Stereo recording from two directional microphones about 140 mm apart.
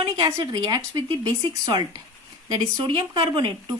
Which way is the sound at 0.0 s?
25° right (ahead or behind).